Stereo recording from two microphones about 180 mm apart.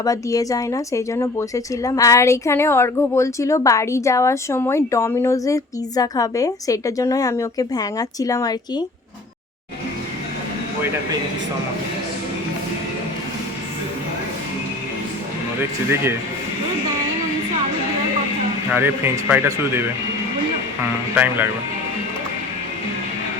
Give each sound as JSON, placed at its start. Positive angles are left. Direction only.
{"t": 0.0, "sound": "a woman's voice", "side_deg": 20}
{"t": 18.7, "sound": "speech", "side_deg": -10}
{"t": 21.2, "sound": "speech", "side_deg": -10}